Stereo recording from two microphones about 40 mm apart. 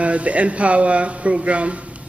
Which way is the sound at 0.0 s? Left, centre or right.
Right.